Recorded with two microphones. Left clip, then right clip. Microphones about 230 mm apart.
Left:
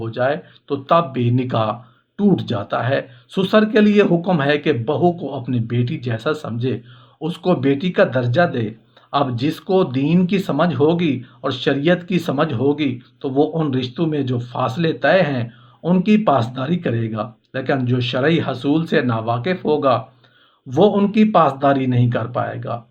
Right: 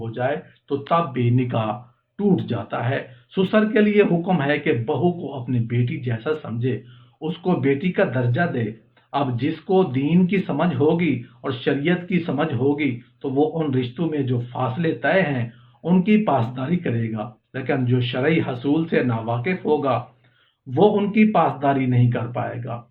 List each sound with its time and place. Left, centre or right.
0.1 s speech: left